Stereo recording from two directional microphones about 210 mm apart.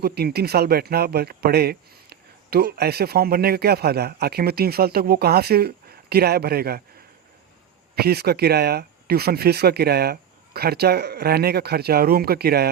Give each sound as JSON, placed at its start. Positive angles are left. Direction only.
{"t": 0.0, "sound": "speech", "side_deg": -50}
{"t": 7.9, "sound": "speech", "side_deg": -50}